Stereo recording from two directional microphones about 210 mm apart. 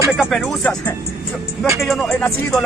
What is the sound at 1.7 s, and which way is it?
Speech, centre (ahead or behind).